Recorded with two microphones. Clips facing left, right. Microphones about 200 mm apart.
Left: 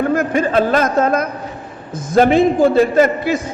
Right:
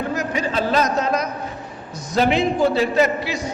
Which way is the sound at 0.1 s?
55° left (ahead or behind).